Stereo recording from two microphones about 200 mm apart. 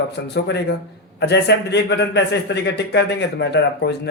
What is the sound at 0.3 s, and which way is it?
A man's voice, 60° left (ahead or behind).